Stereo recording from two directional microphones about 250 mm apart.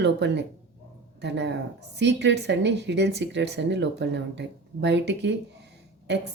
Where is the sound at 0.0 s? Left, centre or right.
Right.